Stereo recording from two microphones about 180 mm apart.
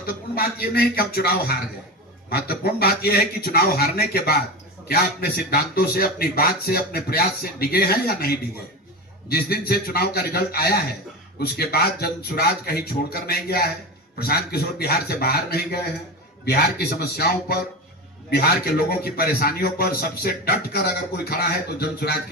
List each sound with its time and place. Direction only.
0.0 s a man's voice: 60° left (ahead or behind)